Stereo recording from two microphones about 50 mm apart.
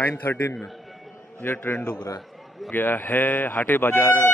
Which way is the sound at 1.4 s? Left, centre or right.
Left.